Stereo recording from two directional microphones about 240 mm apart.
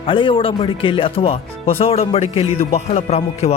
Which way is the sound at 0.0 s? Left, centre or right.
Left.